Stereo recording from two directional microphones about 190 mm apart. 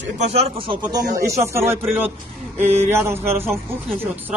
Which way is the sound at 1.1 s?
15° right (ahead or behind).